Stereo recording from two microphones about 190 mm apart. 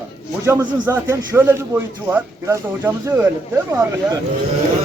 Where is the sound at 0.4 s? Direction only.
10° right (ahead or behind).